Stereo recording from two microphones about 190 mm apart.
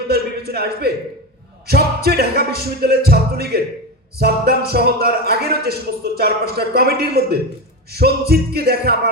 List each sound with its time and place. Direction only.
0.1 s a man's voice: 55° right (ahead or behind)
1.6 s music: 55° right (ahead or behind)